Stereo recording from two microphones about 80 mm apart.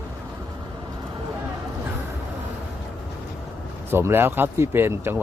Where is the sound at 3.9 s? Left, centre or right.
Right.